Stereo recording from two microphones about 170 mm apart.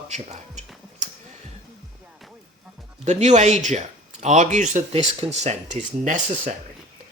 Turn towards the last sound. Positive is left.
turn(degrees=-45)  # may be behind; listen again after turning